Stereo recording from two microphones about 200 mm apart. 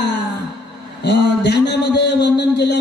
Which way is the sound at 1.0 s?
60° left (ahead or behind).